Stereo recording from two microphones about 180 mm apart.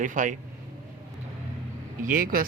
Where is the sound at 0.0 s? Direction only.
45° right (ahead or behind).